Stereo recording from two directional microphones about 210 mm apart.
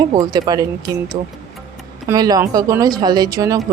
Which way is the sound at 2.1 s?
20° right (ahead or behind).